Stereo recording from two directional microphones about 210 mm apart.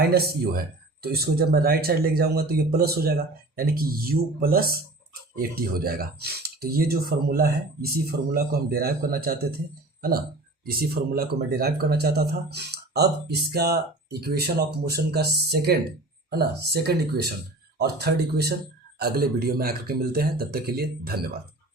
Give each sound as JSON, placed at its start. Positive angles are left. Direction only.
{"t": 0.0, "sound": "a man's voice", "side_deg": -50}
{"t": 10.7, "sound": "a man's voice", "side_deg": -45}